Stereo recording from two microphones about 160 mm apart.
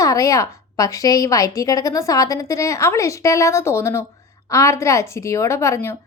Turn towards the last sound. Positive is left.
turn(degrees=15)  # may be behind; listen again after turning